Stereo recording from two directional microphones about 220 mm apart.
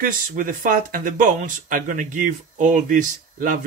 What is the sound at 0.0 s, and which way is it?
Speech, 40° right (ahead or behind).